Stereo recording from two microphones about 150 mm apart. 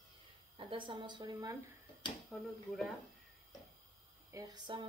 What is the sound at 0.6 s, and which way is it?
A woman's voice, 35° right (ahead or behind).